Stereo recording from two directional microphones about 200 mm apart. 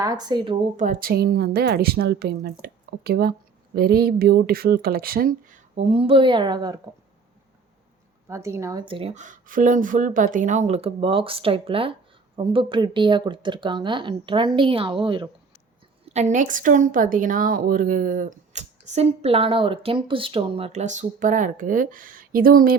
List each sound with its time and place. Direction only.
0.0 s a woman's voice: 20° right (ahead or behind)
0.8 s speech: 45° right (ahead or behind); by 6.7 s 20° right (ahead or behind)
8.3 s a woman's voice: 15° right (ahead or behind)
16.0 s speech: 35° right (ahead or behind)